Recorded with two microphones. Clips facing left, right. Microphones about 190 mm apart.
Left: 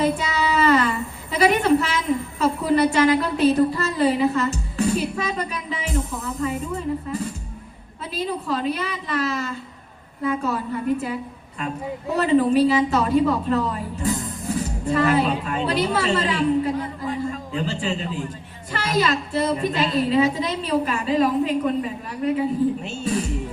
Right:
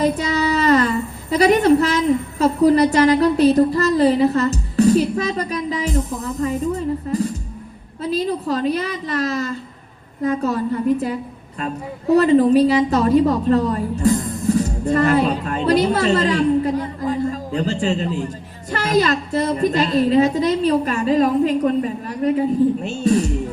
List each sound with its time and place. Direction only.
0.0 s a sound: 40° right (ahead or behind)
2.4 s a woman's voice: 40° right (ahead or behind)
12.1 s a woman's voice: 40° right (ahead or behind)